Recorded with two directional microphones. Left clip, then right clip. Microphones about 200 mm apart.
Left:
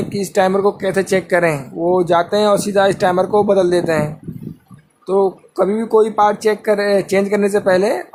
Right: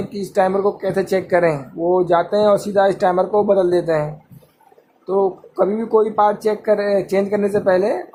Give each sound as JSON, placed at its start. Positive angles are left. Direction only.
{"t": 0.1, "sound": "speech", "side_deg": 20}